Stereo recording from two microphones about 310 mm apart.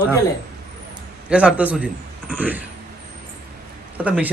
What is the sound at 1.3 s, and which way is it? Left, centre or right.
A man's voice, centre.